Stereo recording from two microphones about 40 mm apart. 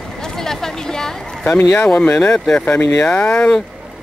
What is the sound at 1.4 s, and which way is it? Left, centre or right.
Speech, left.